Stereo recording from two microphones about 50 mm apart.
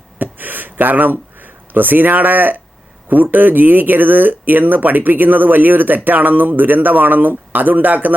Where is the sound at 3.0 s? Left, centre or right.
Right.